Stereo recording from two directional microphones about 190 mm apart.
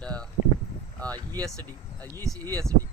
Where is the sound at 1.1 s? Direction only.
20° right (ahead or behind).